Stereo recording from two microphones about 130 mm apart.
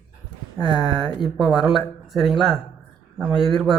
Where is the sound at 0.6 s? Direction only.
35° left (ahead or behind).